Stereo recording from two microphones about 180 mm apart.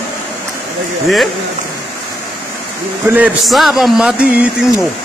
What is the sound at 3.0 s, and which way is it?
A man's voice, 10° right (ahead or behind).